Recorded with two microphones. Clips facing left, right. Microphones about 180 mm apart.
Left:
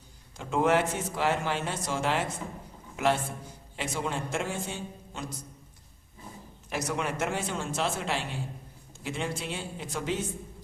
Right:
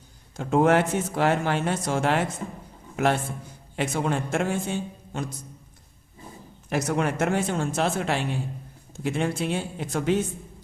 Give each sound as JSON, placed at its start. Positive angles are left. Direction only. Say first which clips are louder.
{"t": 0.3, "sound": "a man's voice", "louder": "right 5 dB", "side_deg": -50}
{"t": 6.7, "sound": "speech", "louder": "right 6 dB", "side_deg": -50}